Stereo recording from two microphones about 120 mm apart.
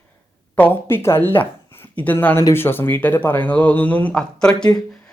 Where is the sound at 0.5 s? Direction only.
15° left (ahead or behind).